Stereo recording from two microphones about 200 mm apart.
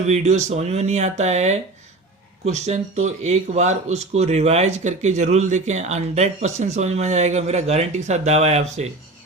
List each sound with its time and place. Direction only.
0.1 s speech: 35° right (ahead or behind)